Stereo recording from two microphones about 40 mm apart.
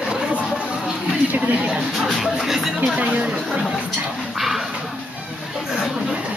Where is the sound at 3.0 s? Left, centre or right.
Right.